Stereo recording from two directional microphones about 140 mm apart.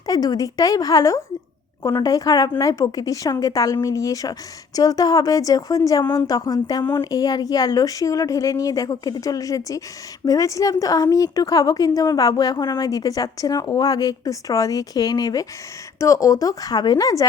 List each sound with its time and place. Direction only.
0.0 s a woman's voice: 25° left (ahead or behind)